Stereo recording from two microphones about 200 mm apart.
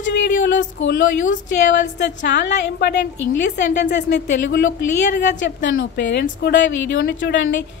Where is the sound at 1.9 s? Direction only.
60° left (ahead or behind).